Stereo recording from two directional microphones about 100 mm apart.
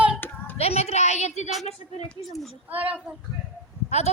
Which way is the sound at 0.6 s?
90° left.